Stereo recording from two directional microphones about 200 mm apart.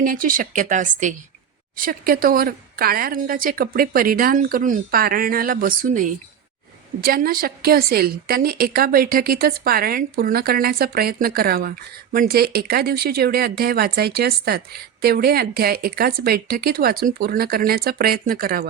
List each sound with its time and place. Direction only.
0.0 s speech: 45° right (ahead or behind)